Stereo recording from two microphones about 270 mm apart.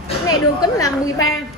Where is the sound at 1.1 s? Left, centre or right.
Left.